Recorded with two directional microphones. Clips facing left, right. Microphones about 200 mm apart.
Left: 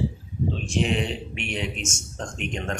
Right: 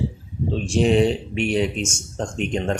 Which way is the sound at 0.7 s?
35° right (ahead or behind).